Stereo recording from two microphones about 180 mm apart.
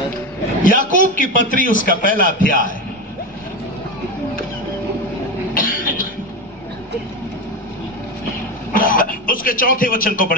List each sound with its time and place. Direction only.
0.7 s a man's voice: 50° left (ahead or behind)
5.5 s cough: 50° left (ahead or behind)
8.7 s a man's voice: 50° left (ahead or behind)